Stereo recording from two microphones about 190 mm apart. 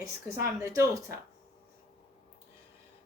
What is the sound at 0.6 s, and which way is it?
Speech, 15° right (ahead or behind).